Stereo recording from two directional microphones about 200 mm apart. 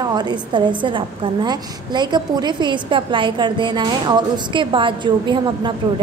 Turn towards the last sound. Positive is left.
turn(degrees=-25)  # may be behind; listen again after turning